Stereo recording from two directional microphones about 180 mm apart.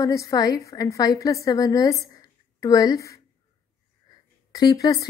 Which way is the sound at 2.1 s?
20° left (ahead or behind).